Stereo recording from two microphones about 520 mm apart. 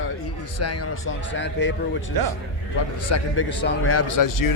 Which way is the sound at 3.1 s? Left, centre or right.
Left.